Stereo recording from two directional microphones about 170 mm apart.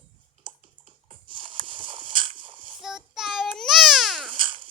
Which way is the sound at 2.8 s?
Centre (ahead or behind).